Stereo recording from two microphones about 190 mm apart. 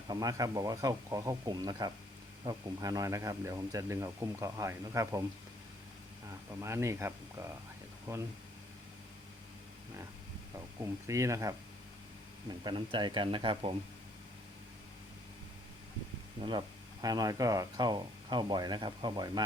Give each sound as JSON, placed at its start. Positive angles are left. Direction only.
{"t": 0.1, "sound": "speech", "side_deg": -20}
{"t": 6.5, "sound": "speech", "side_deg": -15}
{"t": 11.0, "sound": "speech", "side_deg": -15}
{"t": 16.4, "sound": "speech", "side_deg": -25}